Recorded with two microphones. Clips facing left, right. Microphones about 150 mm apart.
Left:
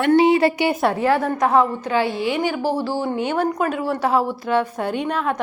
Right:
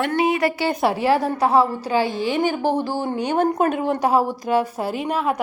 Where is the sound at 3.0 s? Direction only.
40° right (ahead or behind).